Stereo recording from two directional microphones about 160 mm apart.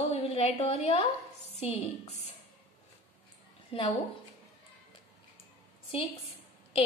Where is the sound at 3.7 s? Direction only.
35° left (ahead or behind).